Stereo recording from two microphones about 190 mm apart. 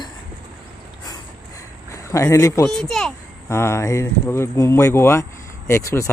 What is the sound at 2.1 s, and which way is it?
Speech, 15° left (ahead or behind).